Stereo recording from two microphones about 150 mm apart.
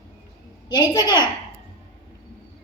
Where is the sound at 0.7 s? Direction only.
30° left (ahead or behind).